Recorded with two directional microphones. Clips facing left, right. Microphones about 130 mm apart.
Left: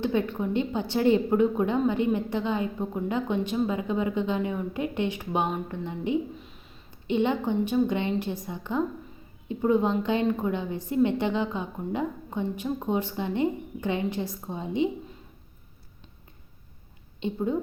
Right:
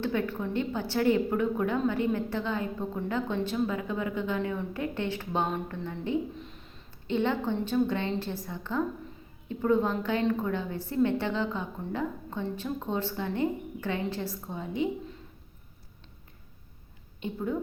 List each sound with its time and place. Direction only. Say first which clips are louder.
0.0 s a woman's voice: left 3 dB; 20° left (ahead or behind)
17.2 s a woman's voice: left 4 dB; 20° left (ahead or behind)